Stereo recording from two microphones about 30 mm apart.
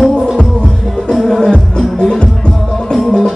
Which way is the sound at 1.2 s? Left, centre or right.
Centre.